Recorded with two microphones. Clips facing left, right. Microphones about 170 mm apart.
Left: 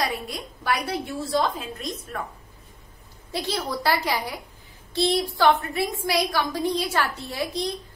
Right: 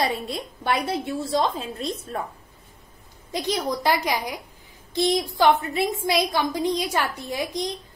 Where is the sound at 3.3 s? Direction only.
20° right (ahead or behind).